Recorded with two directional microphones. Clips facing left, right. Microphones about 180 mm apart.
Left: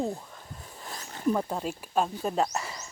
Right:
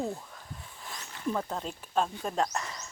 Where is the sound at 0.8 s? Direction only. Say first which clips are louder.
Left 4 dB; 40° left (ahead or behind).